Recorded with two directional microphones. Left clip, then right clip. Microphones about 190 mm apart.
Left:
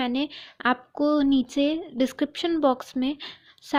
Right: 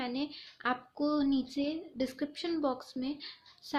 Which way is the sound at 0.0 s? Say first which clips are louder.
Left 9 dB; 40° left (ahead or behind).